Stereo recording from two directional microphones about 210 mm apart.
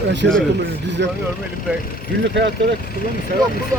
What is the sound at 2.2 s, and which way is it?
Speech, 60° right (ahead or behind).